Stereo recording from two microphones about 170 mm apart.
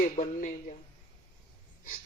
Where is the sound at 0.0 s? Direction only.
50° left (ahead or behind).